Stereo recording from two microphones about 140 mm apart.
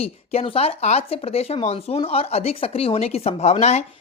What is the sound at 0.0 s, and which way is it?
Speech, 45° left (ahead or behind).